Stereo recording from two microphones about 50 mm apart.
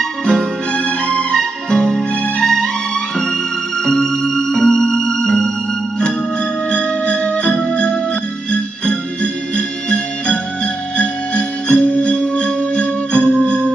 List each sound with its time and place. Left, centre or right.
0.3 s music: centre
6.7 s music: left